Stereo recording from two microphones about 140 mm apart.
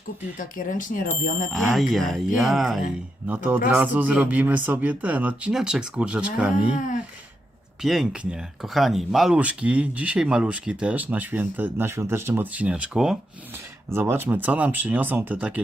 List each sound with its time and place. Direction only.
0.3 s speech: 70° left (ahead or behind)
1.5 s speech: centre (ahead or behind)
3.2 s speech: 10° right (ahead or behind)
7.8 s speech: 5° right (ahead or behind)
13.9 s speech: 15° right (ahead or behind)